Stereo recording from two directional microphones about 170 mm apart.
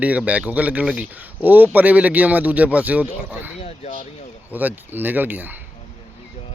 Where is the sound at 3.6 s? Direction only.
40° left (ahead or behind).